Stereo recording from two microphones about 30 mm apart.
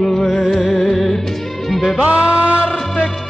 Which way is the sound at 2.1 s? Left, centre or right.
Right.